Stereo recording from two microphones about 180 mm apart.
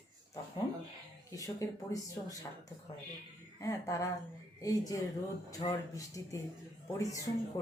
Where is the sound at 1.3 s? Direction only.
20° left (ahead or behind).